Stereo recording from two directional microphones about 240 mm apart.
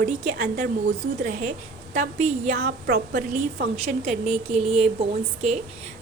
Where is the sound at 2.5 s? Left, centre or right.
Right.